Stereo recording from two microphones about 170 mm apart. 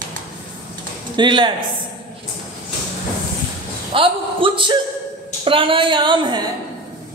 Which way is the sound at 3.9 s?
30° right (ahead or behind).